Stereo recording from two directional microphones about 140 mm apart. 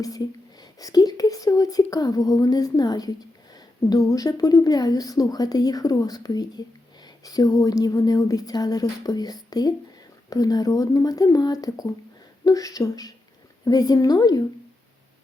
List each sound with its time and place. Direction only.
0.0 s speech: 25° left (ahead or behind)